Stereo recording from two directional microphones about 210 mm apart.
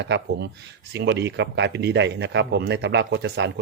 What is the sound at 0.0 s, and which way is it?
A man's voice, 55° right (ahead or behind).